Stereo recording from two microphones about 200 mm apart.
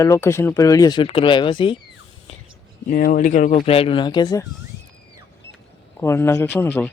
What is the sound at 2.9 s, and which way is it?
Speech, 45° left (ahead or behind).